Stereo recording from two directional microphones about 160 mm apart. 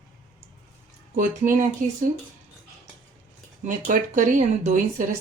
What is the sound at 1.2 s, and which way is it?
Speech, 55° right (ahead or behind).